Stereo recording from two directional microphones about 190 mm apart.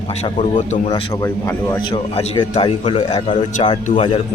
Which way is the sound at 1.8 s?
30° left (ahead or behind).